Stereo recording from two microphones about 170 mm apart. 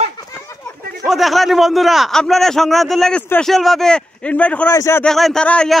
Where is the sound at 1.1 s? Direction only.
Centre (ahead or behind).